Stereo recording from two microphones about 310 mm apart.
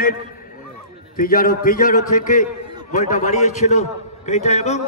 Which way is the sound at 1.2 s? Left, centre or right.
Left.